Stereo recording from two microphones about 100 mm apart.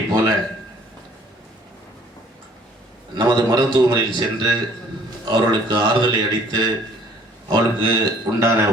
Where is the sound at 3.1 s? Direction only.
45° right (ahead or behind).